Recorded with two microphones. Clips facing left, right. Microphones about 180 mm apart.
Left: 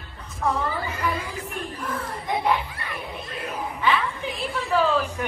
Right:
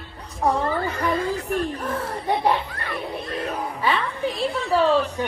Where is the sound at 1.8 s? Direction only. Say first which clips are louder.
Right 4 dB; 35° right (ahead or behind).